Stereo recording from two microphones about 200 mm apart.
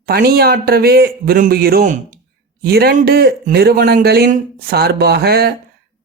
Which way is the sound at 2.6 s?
50° right (ahead or behind).